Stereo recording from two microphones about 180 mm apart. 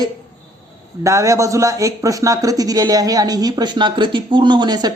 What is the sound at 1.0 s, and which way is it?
Speech, 15° right (ahead or behind).